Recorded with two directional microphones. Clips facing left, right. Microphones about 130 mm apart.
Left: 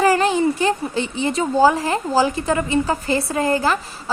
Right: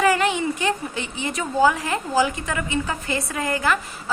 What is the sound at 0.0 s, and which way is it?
A woman's voice, 35° left (ahead or behind).